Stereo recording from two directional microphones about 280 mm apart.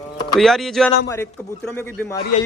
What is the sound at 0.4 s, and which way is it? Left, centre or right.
A man's voice, centre.